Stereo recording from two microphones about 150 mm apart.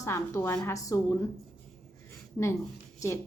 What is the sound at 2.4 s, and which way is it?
Speech, 15° left (ahead or behind).